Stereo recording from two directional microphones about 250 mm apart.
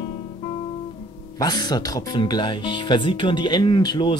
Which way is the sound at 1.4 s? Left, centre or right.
Centre.